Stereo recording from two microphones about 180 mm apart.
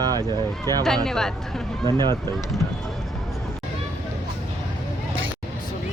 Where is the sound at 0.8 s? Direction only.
Centre (ahead or behind).